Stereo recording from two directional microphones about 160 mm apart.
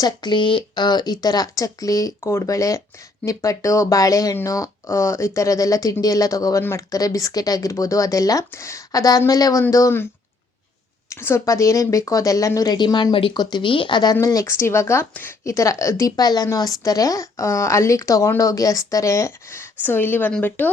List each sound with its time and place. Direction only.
0.0 s speech: 25° left (ahead or behind)
11.1 s speech: 15° left (ahead or behind)